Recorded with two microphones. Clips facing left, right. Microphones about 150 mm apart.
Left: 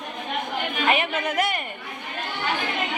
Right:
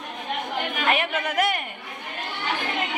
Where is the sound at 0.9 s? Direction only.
5° right (ahead or behind).